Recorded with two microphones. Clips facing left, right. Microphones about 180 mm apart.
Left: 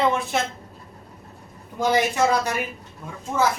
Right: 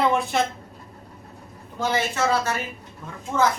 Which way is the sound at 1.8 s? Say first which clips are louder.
Left 4 dB; 15° left (ahead or behind).